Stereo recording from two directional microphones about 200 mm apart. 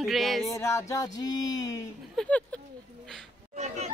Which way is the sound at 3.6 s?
35° right (ahead or behind).